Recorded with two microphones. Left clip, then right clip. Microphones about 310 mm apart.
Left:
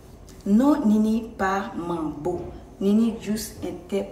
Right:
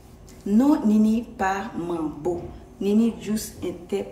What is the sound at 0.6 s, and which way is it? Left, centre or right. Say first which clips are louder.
A woman's voice: right 1 dB; centre.